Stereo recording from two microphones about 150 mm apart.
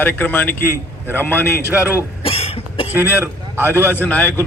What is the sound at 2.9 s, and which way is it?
Speech, 15° right (ahead or behind).